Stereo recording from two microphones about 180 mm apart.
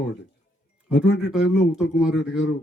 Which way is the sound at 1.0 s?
75° left (ahead or behind).